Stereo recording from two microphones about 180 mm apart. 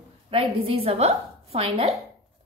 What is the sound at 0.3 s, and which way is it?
A woman's voice, 30° right (ahead or behind).